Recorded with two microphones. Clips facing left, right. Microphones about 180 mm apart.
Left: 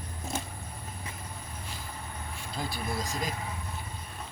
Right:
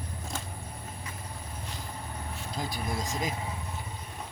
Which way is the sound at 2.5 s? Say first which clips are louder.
Even; 15° right (ahead or behind).